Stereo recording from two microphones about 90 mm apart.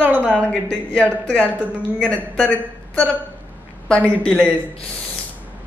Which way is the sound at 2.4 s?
15° left (ahead or behind).